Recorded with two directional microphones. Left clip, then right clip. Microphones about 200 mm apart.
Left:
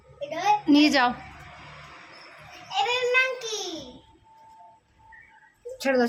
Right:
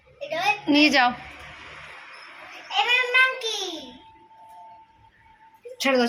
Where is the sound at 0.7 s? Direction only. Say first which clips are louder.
Right 3 dB; 15° left (ahead or behind).